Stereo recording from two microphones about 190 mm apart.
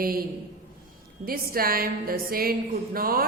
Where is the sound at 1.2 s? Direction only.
50° right (ahead or behind).